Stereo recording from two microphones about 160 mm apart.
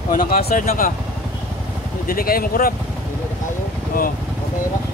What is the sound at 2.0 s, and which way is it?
Speech, 65° left (ahead or behind).